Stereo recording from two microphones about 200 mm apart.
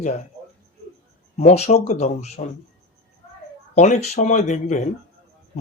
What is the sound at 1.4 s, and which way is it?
Speech, 35° left (ahead or behind).